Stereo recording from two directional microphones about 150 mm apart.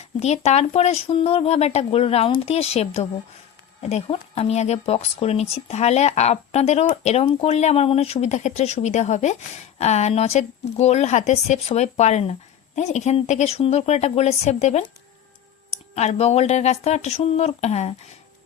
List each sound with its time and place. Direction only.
0.0 s speech: 45° left (ahead or behind)